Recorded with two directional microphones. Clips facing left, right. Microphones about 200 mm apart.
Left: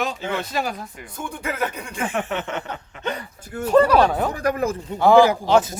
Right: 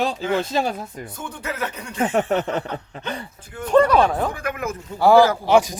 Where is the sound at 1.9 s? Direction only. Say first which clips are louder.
Right 6 dB; 40° right (ahead or behind).